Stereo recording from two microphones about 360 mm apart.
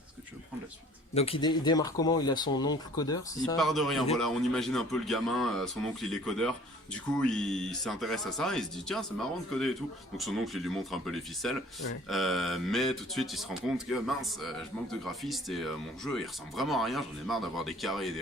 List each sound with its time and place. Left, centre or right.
1.1 s speech: centre